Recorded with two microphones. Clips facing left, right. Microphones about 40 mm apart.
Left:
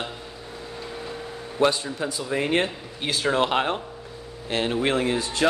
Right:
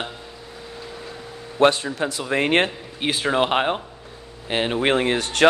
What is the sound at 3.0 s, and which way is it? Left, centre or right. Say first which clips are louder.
Speech: right 3 dB; right.